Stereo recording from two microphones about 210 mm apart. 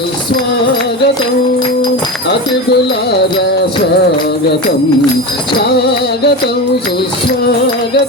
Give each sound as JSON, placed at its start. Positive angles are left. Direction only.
{"t": 3.1, "sound": "music", "side_deg": 55}
{"t": 5.5, "sound": "music", "side_deg": 50}